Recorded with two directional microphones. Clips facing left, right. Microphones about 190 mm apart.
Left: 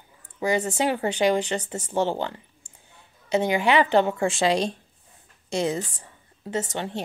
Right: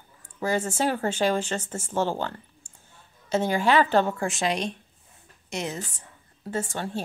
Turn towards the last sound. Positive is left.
turn(degrees=20)  # may be behind; listen again after turning